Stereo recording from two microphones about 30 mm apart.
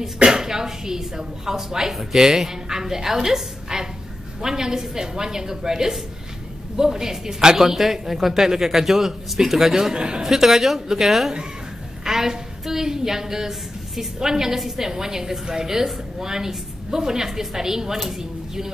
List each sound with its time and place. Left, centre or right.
0.2 s a woman's voice: right
9.9 s a woman's voice: right
10.2 s a woman's voice: centre